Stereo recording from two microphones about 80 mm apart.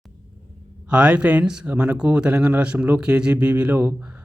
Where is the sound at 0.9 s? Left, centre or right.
Centre.